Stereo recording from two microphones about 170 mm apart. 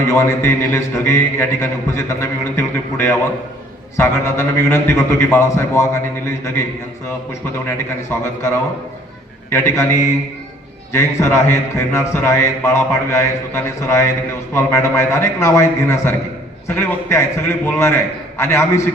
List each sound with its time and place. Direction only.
0.1 s a man's voice: 15° left (ahead or behind)
7.7 s a man's voice: 15° left (ahead or behind)